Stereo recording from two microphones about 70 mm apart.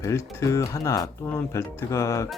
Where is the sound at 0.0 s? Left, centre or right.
Left.